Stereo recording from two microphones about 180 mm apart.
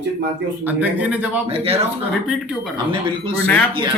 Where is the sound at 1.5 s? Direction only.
35° right (ahead or behind).